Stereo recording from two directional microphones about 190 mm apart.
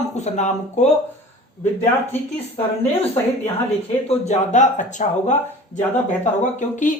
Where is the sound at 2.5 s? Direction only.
30° left (ahead or behind).